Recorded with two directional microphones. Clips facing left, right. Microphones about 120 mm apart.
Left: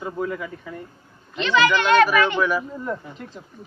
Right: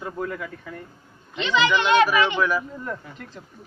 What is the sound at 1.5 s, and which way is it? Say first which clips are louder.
Speech: left 2 dB; 20° right (ahead or behind).